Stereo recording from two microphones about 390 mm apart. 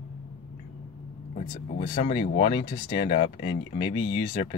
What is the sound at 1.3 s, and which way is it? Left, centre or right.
Speech, centre.